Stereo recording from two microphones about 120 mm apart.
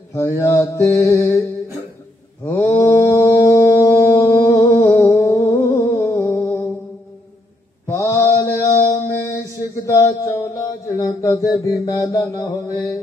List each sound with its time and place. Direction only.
0.1 s mantra: 25° left (ahead or behind)
2.8 s a sound: 20° left (ahead or behind)
7.8 s mantra: 25° left (ahead or behind)